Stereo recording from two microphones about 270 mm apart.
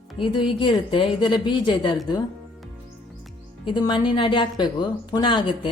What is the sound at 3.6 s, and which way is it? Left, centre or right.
Speech, centre.